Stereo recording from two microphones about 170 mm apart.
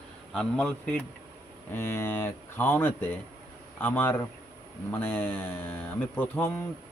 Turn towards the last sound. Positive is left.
turn(degrees=10)  # may be behind; listen again after turning